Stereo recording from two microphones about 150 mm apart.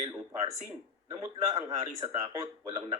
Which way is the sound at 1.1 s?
25° right (ahead or behind).